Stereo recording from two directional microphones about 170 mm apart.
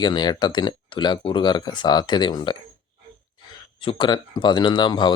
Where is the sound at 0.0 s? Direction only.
25° left (ahead or behind).